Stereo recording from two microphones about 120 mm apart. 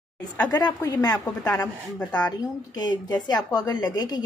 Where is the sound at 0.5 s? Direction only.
35° left (ahead or behind).